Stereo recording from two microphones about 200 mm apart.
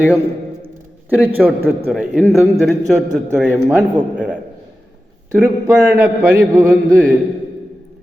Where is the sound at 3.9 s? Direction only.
5° right (ahead or behind).